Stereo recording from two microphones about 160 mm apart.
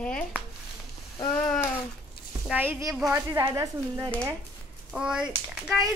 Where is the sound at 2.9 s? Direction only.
Centre (ahead or behind).